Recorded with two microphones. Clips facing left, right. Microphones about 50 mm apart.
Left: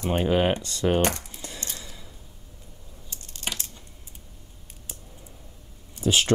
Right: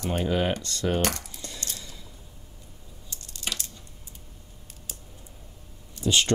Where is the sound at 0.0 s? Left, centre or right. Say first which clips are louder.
Left 3 dB; left.